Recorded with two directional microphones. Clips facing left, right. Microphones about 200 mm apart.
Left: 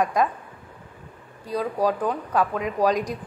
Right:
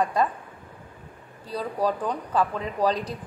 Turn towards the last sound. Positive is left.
turn(degrees=10)  # may be behind; listen again after turning